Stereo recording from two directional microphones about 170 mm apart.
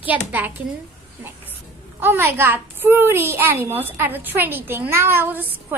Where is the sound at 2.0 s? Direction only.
15° right (ahead or behind).